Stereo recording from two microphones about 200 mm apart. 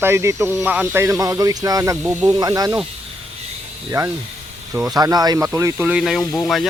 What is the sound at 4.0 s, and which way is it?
Speech, 15° right (ahead or behind).